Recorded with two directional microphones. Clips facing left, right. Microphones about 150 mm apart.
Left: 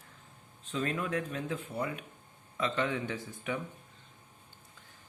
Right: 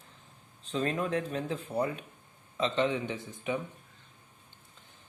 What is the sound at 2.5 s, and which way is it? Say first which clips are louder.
Speech: right 3 dB; 25° right (ahead or behind).